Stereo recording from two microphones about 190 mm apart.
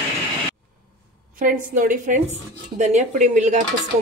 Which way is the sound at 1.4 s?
45° right (ahead or behind).